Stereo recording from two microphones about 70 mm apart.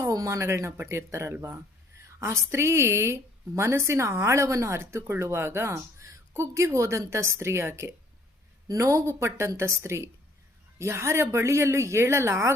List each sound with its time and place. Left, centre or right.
0.1 s a woman's voice: right
8.6 s a woman's voice: right